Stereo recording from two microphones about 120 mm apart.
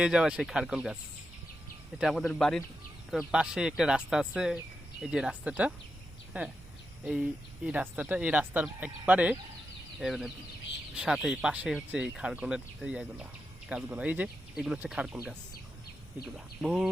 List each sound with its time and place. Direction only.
0.0 s speech: 5° right (ahead or behind)
2.0 s speech: centre (ahead or behind)
16.6 s speech: 5° right (ahead or behind)